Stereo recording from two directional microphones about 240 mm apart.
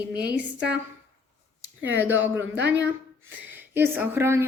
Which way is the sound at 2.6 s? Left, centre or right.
Right.